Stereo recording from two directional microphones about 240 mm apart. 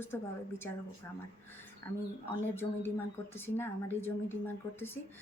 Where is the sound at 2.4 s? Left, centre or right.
Centre.